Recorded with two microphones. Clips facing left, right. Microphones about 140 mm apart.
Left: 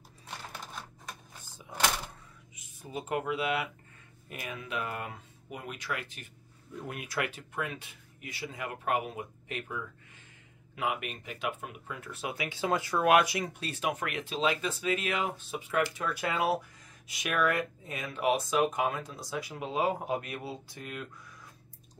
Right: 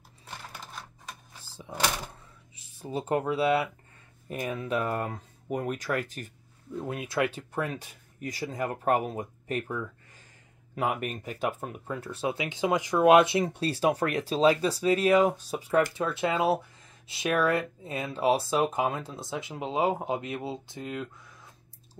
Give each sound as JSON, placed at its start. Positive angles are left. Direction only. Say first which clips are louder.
{"t": 2.5, "sound": "speech", "louder": "right 6 dB", "side_deg": -30}
{"t": 6.7, "sound": "speech", "louder": "right 6 dB", "side_deg": -30}
{"t": 16.0, "sound": "speech", "louder": "right 4 dB", "side_deg": -25}